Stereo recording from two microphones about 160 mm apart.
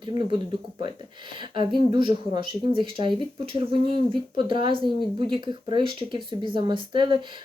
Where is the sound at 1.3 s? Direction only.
30° right (ahead or behind).